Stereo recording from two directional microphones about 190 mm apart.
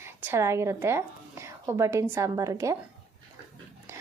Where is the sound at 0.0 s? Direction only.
15° right (ahead or behind).